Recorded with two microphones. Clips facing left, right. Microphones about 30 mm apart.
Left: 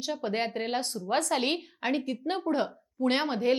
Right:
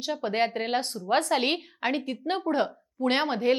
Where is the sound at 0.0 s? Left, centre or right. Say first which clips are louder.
Right 4 dB; centre.